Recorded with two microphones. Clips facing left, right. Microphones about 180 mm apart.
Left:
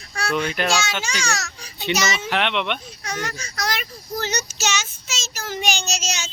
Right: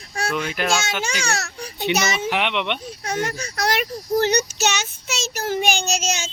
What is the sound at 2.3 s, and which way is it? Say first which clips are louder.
Speech: even; 10° right (ahead or behind).